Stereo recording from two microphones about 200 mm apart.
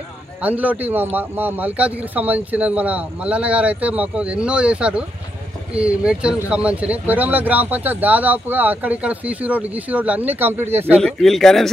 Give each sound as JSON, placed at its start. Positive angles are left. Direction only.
{"t": 0.4, "sound": "speech", "side_deg": -5}
{"t": 11.0, "sound": "speech", "side_deg": 0}